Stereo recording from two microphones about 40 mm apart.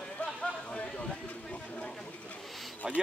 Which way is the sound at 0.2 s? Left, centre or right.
Left.